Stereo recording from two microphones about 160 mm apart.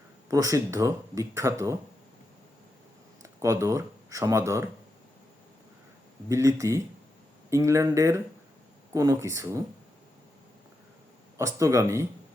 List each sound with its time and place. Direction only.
0.3 s speech: 20° right (ahead or behind)
3.2 s speech: 20° right (ahead or behind)
6.2 s speech: 20° right (ahead or behind)
11.3 s speech: 20° right (ahead or behind)